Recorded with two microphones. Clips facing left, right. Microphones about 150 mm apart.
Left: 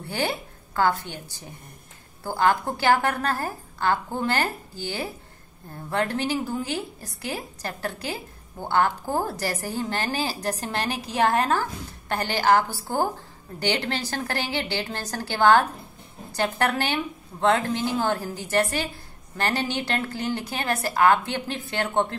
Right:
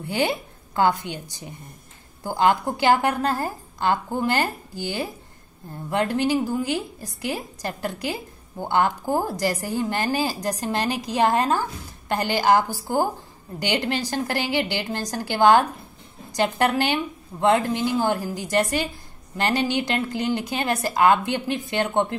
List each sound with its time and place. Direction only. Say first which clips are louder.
0.0 s a woman's voice: right 4 dB; 15° right (ahead or behind)